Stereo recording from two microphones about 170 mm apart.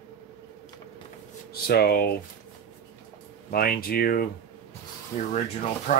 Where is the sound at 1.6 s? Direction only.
65° left (ahead or behind).